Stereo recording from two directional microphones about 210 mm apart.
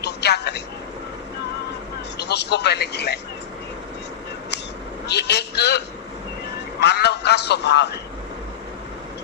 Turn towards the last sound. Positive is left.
turn(degrees=55)  # may be behind; listen again after turning